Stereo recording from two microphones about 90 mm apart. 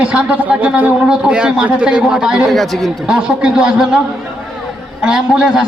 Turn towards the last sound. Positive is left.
turn(degrees=-10)  # may be behind; listen again after turning